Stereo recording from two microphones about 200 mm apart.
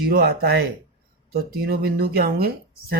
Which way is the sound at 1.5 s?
50° right (ahead or behind).